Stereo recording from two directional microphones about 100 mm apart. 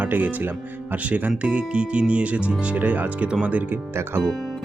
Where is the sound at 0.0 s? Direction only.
15° right (ahead or behind).